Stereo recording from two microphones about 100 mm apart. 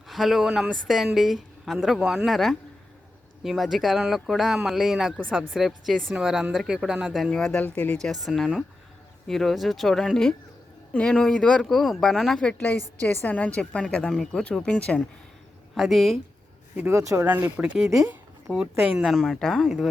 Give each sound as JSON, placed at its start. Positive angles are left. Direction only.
{"t": 0.1, "sound": "a woman's voice", "side_deg": 0}
{"t": 7.3, "sound": "speech", "side_deg": 5}
{"t": 7.6, "sound": "speech", "side_deg": 20}
{"t": 8.0, "sound": "a woman's voice", "side_deg": 0}
{"t": 15.7, "sound": "a woman's voice", "side_deg": 0}
{"t": 16.9, "sound": "speech", "side_deg": -30}
{"t": 17.2, "sound": "speech", "side_deg": -15}
{"t": 19.1, "sound": "a woman's voice", "side_deg": 5}